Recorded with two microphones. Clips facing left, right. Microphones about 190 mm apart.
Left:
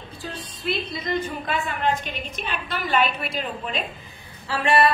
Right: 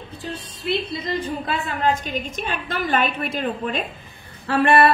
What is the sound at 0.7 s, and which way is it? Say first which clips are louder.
A woman's voice: right 2 dB; 30° right (ahead or behind).